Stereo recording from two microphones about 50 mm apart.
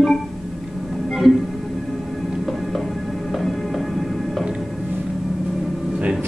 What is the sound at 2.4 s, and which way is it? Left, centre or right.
Music, centre.